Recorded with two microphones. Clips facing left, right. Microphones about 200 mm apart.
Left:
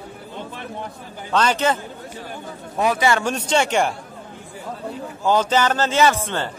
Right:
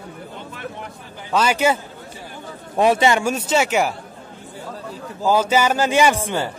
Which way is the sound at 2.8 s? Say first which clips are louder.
Right 3 dB; 25° right (ahead or behind).